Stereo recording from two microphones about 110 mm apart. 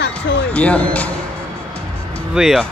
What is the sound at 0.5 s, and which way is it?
Speech, 10° left (ahead or behind).